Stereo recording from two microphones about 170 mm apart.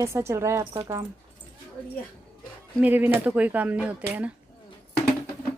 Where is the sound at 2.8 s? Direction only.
10° right (ahead or behind).